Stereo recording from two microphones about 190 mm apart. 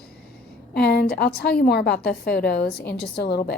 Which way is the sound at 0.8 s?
60° left (ahead or behind).